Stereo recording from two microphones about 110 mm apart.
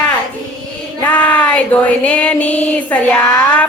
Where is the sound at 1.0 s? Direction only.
10° left (ahead or behind).